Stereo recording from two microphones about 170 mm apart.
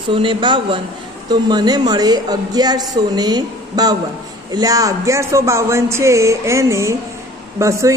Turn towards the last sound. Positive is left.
turn(degrees=-15)  # may be behind; listen again after turning